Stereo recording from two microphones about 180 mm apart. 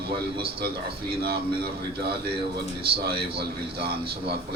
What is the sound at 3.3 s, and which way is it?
Speech, 60° right (ahead or behind).